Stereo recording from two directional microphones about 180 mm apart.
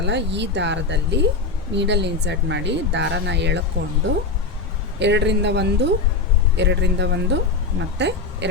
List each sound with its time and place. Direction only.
0.0 s speech: 75° right (ahead or behind)